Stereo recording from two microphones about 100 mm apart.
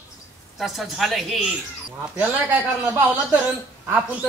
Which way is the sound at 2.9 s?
15° right (ahead or behind).